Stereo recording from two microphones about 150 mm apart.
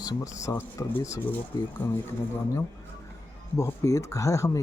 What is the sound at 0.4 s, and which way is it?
Speech, 20° left (ahead or behind).